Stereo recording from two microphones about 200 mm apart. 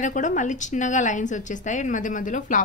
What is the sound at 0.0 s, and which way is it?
A woman's voice, 40° left (ahead or behind).